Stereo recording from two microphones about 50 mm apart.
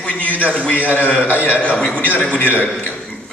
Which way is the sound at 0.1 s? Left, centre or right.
Left.